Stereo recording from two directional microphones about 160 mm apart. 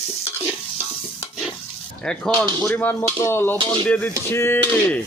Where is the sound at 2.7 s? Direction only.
10° left (ahead or behind).